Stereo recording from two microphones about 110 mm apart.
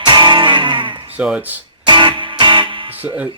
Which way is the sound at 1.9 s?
45° right (ahead or behind).